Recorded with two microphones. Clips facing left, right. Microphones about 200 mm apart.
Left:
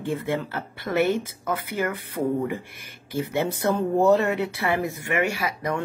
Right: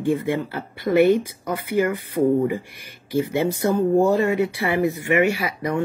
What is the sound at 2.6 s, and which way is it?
Speech, 50° left (ahead or behind).